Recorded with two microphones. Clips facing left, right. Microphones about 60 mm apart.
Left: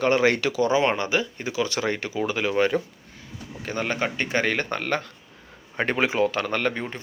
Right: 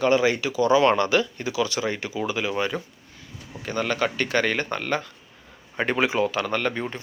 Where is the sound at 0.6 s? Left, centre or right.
Left.